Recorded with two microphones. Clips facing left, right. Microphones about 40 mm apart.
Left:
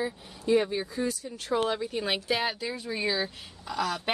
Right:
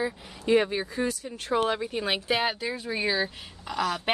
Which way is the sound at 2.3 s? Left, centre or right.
Right.